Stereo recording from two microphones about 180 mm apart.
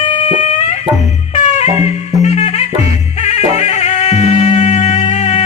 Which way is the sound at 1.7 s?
20° right (ahead or behind).